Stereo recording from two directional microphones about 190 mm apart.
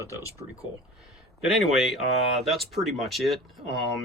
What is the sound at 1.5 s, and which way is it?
Speech, centre (ahead or behind).